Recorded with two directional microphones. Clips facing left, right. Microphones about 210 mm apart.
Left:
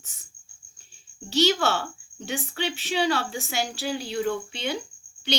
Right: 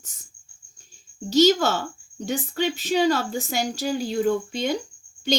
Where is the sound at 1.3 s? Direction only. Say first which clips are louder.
Right 5 dB; 40° right (ahead or behind).